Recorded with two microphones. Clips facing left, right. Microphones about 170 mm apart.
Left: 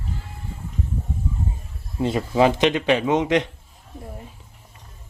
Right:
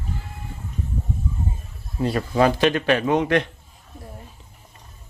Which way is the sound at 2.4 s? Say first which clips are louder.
Left 1 dB; 20° left (ahead or behind).